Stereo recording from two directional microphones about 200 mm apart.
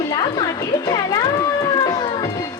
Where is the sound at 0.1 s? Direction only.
20° left (ahead or behind).